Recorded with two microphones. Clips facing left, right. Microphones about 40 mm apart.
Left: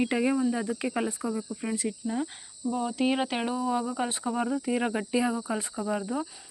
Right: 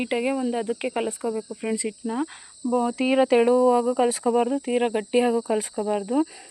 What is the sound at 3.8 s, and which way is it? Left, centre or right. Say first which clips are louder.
Speech: right 9 dB; right.